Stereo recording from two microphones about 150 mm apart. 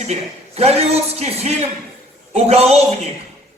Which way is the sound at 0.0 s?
45° right (ahead or behind).